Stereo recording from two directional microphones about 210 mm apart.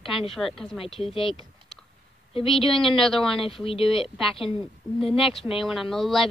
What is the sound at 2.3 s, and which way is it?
Speech, 25° left (ahead or behind).